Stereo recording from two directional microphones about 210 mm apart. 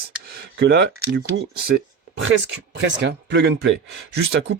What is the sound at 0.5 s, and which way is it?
Speech, 55° right (ahead or behind).